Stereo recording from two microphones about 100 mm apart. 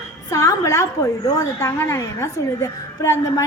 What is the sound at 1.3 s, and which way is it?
A woman's voice, 30° left (ahead or behind).